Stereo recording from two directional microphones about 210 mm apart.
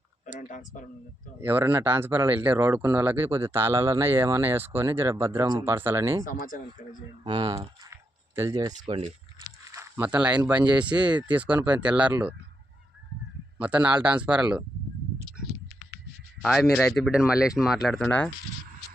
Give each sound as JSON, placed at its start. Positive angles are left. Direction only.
{"t": 0.3, "sound": "speech", "side_deg": 40}
{"t": 1.4, "sound": "speech", "side_deg": -10}
{"t": 6.2, "sound": "speech", "side_deg": 40}
{"t": 7.3, "sound": "speech", "side_deg": -20}
{"t": 9.7, "sound": "speech", "side_deg": -10}
{"t": 13.6, "sound": "speech", "side_deg": -5}
{"t": 16.4, "sound": "speech", "side_deg": 0}